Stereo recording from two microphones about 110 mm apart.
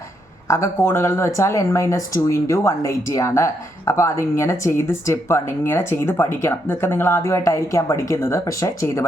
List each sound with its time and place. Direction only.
0.4 s speech: 25° left (ahead or behind)